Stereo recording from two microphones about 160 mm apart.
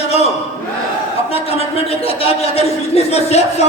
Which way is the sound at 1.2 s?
40° left (ahead or behind).